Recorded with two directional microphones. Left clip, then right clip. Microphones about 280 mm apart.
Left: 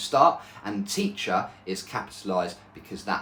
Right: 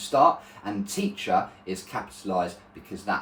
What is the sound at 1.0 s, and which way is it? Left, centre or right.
Speech, centre.